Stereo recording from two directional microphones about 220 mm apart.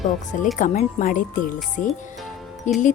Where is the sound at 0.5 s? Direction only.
35° left (ahead or behind).